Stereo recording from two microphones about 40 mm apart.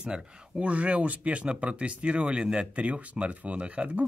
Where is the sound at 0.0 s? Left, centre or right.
Right.